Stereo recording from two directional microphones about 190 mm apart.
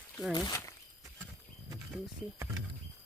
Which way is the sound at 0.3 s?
20° left (ahead or behind).